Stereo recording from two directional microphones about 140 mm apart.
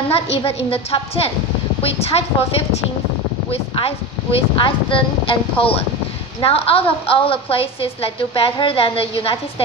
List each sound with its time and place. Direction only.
0.1 s a woman's voice: 45° left (ahead or behind)
3.5 s a woman's voice: 45° left (ahead or behind)